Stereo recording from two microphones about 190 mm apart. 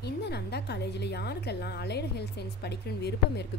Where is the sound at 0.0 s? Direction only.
60° left (ahead or behind).